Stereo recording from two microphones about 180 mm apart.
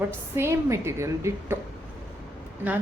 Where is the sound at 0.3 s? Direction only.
15° right (ahead or behind).